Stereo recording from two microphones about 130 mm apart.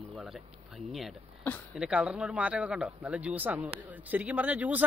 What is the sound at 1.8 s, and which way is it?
Speech, 10° right (ahead or behind).